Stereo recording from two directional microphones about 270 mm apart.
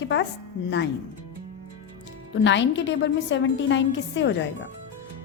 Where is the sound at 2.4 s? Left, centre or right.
Left.